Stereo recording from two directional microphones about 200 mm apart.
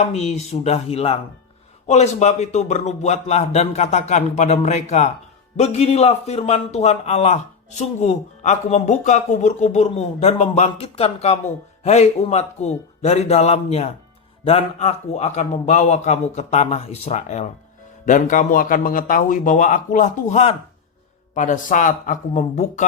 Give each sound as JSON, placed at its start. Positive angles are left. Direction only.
{"t": 0.0, "sound": "a man's voice", "side_deg": 35}